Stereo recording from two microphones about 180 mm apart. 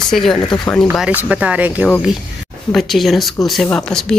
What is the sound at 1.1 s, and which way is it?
A woman's voice, 10° right (ahead or behind).